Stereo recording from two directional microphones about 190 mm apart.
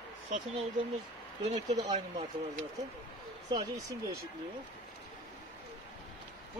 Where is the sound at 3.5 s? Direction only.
20° right (ahead or behind).